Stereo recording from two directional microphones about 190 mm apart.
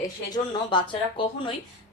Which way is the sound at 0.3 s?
25° left (ahead or behind).